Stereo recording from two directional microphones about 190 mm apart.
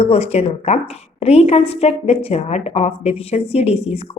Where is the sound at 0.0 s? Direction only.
35° left (ahead or behind).